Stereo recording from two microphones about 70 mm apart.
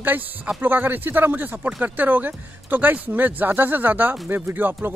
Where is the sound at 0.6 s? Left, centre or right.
Right.